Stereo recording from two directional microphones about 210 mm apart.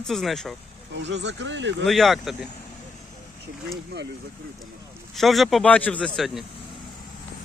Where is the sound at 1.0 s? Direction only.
55° right (ahead or behind).